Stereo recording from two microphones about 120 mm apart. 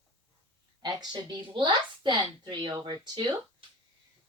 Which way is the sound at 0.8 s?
35° right (ahead or behind).